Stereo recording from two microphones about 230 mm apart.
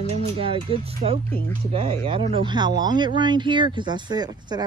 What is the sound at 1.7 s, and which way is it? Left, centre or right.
Speech, right.